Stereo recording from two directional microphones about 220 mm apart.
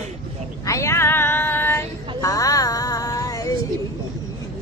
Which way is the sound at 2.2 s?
15° left (ahead or behind).